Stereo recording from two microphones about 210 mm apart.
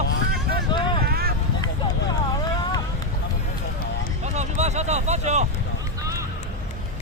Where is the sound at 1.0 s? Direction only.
45° right (ahead or behind).